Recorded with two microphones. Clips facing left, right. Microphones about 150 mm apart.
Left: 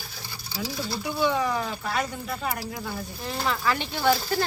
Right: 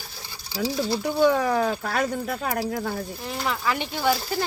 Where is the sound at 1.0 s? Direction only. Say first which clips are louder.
Right 4 dB; 50° right (ahead or behind).